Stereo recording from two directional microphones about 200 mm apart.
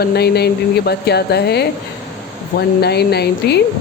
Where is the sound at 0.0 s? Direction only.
55° left (ahead or behind).